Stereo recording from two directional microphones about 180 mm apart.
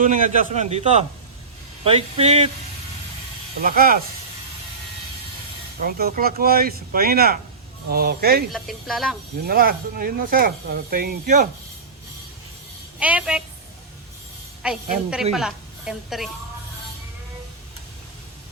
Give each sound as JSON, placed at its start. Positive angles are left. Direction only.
{"t": 0.0, "sound": "a man's voice", "side_deg": -45}
{"t": 3.6, "sound": "speech", "side_deg": -55}
{"t": 5.8, "sound": "speech", "side_deg": -55}
{"t": 8.5, "sound": "speech", "side_deg": 0}
{"t": 9.5, "sound": "speech", "side_deg": -55}
{"t": 13.0, "sound": "a woman's voice", "side_deg": -5}
{"t": 14.6, "sound": "a woman's voice", "side_deg": -5}